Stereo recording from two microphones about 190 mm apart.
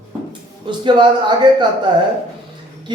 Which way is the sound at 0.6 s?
25° right (ahead or behind).